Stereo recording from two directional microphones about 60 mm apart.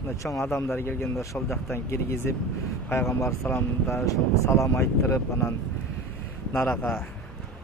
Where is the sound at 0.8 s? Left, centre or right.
Left.